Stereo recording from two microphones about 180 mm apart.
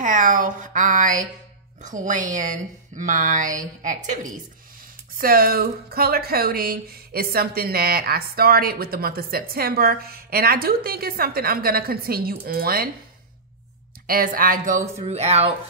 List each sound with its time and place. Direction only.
0.0 s speech: 45° right (ahead or behind)
14.0 s speech: 50° right (ahead or behind); by 15.5 s 35° right (ahead or behind)